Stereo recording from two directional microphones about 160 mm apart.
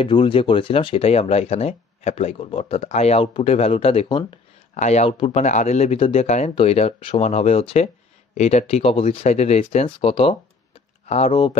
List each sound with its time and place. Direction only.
0.0 s speech: 30° left (ahead or behind)